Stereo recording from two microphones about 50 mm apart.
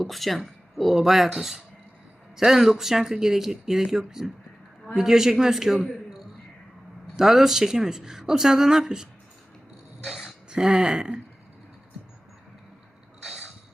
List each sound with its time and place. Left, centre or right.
0.0 s speech: centre
10.0 s a sound: centre
10.5 s speech: centre
13.2 s vehicle: centre